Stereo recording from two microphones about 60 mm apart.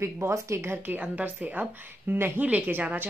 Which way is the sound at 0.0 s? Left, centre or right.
Right.